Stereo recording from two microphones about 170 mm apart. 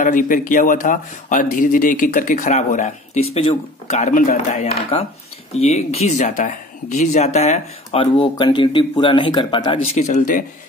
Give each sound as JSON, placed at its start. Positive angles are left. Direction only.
{"t": 0.0, "sound": "speech", "side_deg": 50}
{"t": 9.9, "sound": "speech", "side_deg": 45}